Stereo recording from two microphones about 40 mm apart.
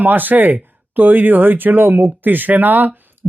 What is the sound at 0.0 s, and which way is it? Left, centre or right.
Speech, right.